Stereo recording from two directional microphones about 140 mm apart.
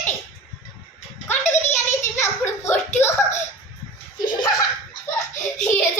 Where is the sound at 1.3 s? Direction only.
20° left (ahead or behind).